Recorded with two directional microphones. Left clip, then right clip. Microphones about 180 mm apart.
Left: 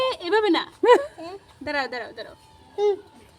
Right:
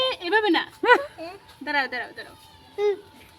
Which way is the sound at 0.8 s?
10° left (ahead or behind).